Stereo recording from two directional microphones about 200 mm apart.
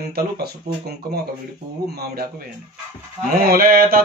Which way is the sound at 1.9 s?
55° right (ahead or behind).